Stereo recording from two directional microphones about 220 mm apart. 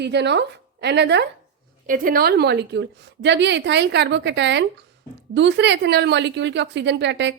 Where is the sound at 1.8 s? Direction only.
40° right (ahead or behind).